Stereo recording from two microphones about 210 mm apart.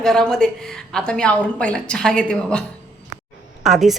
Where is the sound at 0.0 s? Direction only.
Centre (ahead or behind).